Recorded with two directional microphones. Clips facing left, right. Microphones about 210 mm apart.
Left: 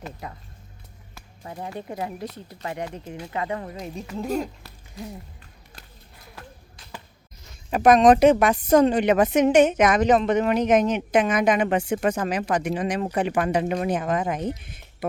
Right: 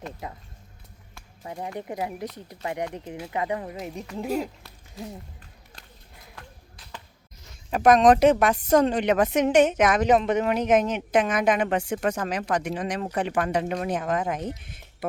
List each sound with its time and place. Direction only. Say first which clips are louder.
0.2 s speech: right 1 dB; 20° right (ahead or behind)
1.8 s speech: even; 15° right (ahead or behind)
4.3 s speech: even; 5° right (ahead or behind)
6.3 s a sound: left 4 dB; 5° left (ahead or behind)
7.7 s a woman's voice: left 2 dB; centre (ahead or behind)